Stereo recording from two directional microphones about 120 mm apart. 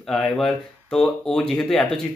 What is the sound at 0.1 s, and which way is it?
A man's voice, 5° left (ahead or behind).